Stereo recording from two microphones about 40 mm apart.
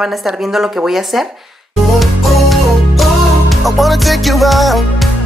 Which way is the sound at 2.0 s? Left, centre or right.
Centre.